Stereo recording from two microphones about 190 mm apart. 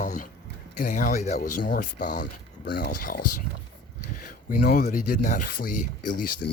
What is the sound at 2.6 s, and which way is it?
Speech, 55° left (ahead or behind).